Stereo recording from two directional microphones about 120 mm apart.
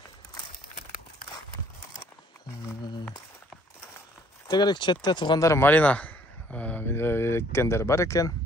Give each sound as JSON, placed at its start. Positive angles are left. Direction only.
{"t": 4.5, "sound": "speech", "side_deg": 35}
{"t": 5.4, "sound": "speech", "side_deg": 20}